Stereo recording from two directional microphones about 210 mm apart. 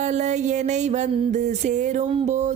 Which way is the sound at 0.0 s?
35° right (ahead or behind).